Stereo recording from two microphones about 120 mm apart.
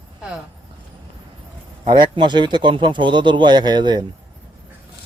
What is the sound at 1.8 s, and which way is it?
Speech, 40° right (ahead or behind).